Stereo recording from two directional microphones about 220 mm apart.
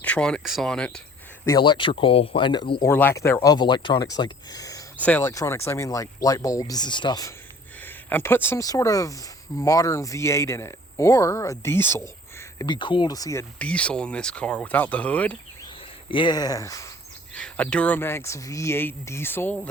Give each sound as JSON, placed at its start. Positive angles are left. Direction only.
{"t": 0.0, "sound": "speech", "side_deg": 5}
{"t": 1.5, "sound": "speech", "side_deg": 20}
{"t": 16.0, "sound": "speech", "side_deg": 20}
{"t": 17.3, "sound": "speech", "side_deg": 5}